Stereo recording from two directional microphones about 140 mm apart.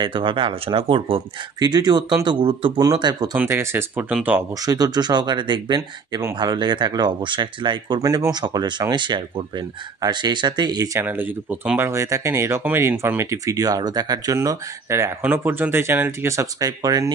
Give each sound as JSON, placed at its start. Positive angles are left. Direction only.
{"t": 0.0, "sound": "speech", "side_deg": -35}
{"t": 3.3, "sound": "speech", "side_deg": -15}
{"t": 4.6, "sound": "speech", "side_deg": -25}
{"t": 11.1, "sound": "speech", "side_deg": -10}